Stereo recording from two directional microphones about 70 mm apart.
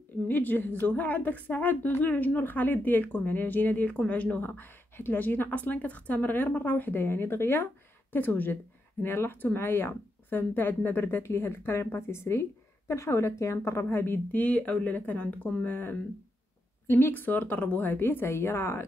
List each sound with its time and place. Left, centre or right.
0.3 s a woman's voice: left
15.7 s a woman's voice: left